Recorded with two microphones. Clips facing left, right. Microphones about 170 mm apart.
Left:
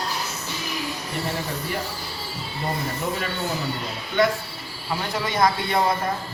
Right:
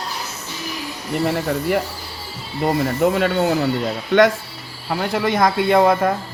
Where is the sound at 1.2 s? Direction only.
70° right (ahead or behind).